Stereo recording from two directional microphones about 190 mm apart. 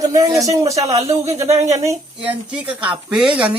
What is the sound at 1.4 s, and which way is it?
Speech, 35° right (ahead or behind).